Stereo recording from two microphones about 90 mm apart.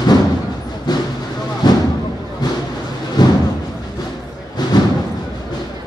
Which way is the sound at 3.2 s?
50° left (ahead or behind).